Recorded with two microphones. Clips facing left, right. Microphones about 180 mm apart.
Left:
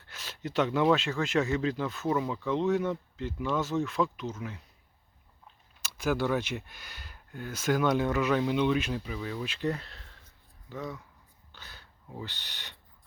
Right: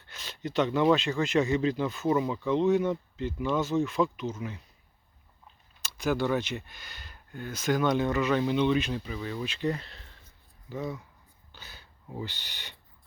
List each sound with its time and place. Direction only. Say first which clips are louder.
0.1 s speech: right 2 dB; 5° left (ahead or behind)
5.8 s speech: right 1 dB; 5° left (ahead or behind)